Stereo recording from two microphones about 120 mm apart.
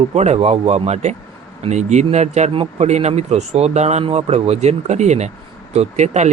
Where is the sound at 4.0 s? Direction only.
55° right (ahead or behind).